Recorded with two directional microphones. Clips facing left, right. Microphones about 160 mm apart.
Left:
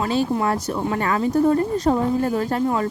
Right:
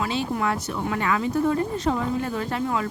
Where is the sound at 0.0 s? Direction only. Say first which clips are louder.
Left 5 dB; 40° left (ahead or behind).